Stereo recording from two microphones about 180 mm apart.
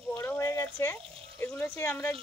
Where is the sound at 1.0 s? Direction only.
30° right (ahead or behind).